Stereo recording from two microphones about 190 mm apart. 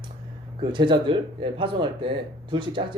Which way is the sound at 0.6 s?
25° right (ahead or behind).